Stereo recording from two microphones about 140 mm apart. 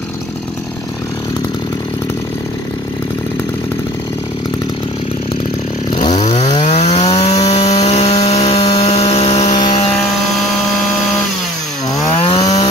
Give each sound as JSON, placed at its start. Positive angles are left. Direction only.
{"t": 6.1, "sound": "chainsaw", "side_deg": 50}
{"t": 7.0, "sound": "wood", "side_deg": 35}
{"t": 7.8, "sound": "sawing", "side_deg": 50}
{"t": 9.5, "sound": "helicopter", "side_deg": 35}
{"t": 12.3, "sound": "chainsaw", "side_deg": 25}